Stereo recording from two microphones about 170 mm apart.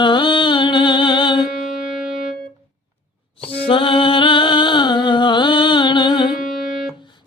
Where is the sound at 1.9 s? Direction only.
5° right (ahead or behind).